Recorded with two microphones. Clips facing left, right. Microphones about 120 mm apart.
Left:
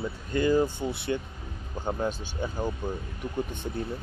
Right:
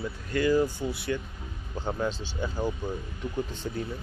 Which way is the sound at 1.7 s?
15° left (ahead or behind).